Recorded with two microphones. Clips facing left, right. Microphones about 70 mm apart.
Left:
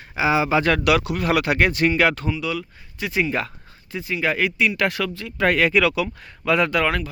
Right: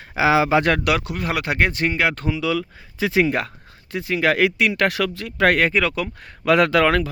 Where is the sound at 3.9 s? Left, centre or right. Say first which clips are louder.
Right 4 dB; right.